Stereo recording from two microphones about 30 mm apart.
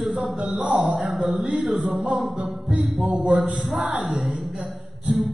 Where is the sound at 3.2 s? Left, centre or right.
Right.